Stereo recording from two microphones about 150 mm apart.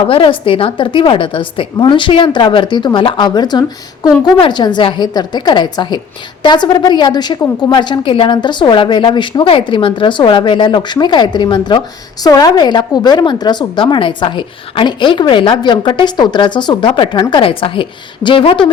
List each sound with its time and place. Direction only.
0.1 s a woman's voice: 35° left (ahead or behind)